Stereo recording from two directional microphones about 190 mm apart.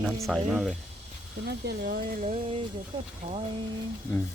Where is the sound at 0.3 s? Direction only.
Centre (ahead or behind).